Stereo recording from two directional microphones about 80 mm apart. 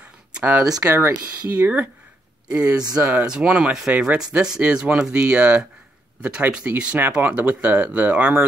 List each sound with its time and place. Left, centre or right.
0.3 s speech: centre
0.7 s speech: right; by 8.5 s centre